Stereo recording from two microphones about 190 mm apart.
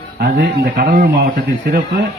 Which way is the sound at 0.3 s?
50° right (ahead or behind).